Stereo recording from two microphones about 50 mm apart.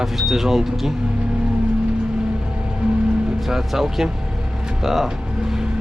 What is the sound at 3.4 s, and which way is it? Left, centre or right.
Speech, centre.